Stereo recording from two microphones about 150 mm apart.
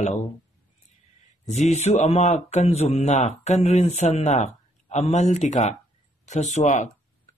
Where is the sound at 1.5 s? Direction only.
45° left (ahead or behind).